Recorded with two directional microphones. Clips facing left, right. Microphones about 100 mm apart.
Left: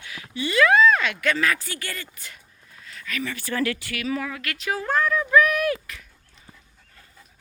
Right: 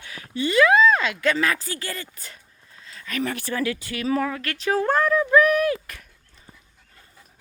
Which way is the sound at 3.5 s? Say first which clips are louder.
Even; 15° right (ahead or behind).